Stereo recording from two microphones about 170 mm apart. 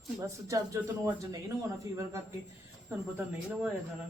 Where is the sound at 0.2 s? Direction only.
20° right (ahead or behind).